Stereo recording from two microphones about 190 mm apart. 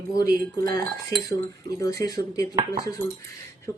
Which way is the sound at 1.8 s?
20° left (ahead or behind).